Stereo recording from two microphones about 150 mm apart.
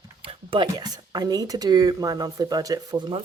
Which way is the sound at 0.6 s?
25° right (ahead or behind).